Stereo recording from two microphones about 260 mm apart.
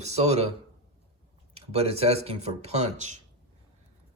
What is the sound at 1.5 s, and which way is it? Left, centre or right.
Speech, right.